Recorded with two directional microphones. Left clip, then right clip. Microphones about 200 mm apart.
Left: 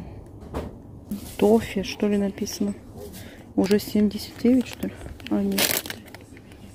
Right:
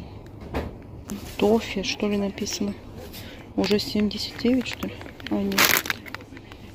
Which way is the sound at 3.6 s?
20° left (ahead or behind).